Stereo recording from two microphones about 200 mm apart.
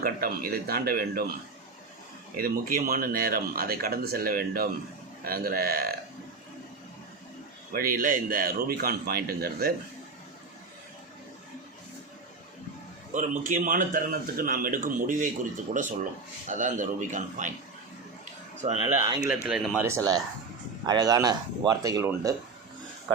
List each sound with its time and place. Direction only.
0.0 s speech: 45° right (ahead or behind)
2.3 s speech: 45° right (ahead or behind)
7.7 s speech: 45° right (ahead or behind)
13.1 s speech: 40° right (ahead or behind)
18.6 s speech: 30° right (ahead or behind)
19.3 s speech: 5° right (ahead or behind)
19.8 s speech: 15° right (ahead or behind)